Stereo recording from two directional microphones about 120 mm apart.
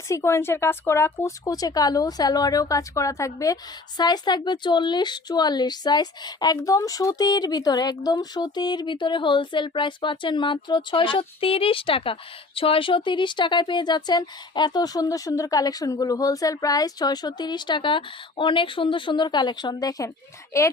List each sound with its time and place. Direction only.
0.1 s speech: 25° left (ahead or behind)